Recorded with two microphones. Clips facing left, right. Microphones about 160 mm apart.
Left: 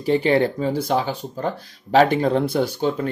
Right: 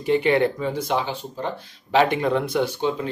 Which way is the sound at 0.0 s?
35° left (ahead or behind).